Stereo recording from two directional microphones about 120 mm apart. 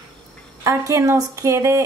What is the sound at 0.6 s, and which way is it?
Speech, 25° right (ahead or behind).